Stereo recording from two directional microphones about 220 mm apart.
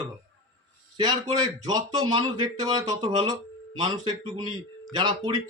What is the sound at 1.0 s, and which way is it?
Speech, 20° right (ahead or behind).